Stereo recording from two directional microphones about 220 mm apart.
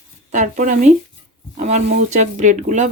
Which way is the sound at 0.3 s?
35° right (ahead or behind).